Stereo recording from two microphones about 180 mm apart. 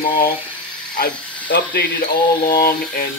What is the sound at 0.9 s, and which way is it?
Speech, 60° left (ahead or behind).